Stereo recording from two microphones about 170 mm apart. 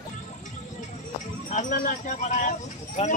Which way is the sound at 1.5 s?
50° left (ahead or behind).